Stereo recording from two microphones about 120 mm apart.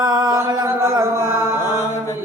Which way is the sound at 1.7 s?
25° left (ahead or behind).